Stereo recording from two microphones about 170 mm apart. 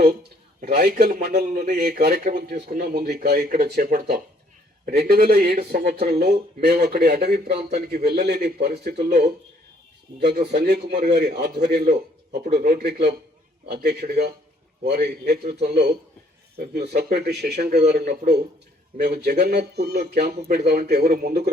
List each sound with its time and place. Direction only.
0.6 s speech: 70° right (ahead or behind)
6.1 s speech: 45° right (ahead or behind)
6.3 s speech: 70° right (ahead or behind)